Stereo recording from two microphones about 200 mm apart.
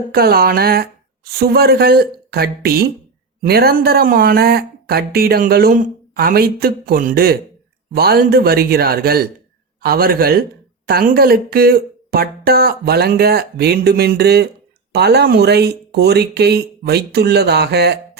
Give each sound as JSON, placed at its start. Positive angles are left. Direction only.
{"t": 0.1, "sound": "speech", "side_deg": -50}